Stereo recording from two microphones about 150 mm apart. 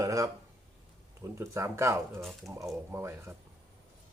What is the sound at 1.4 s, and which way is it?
Speech, 15° right (ahead or behind).